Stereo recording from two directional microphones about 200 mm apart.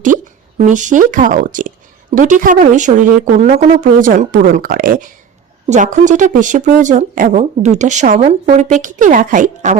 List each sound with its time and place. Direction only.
0.6 s speech: 40° right (ahead or behind)